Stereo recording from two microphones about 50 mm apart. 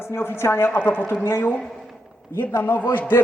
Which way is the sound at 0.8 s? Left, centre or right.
Left.